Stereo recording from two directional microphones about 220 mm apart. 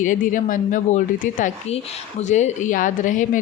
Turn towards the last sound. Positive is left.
turn(degrees=35)  # may be behind; listen again after turning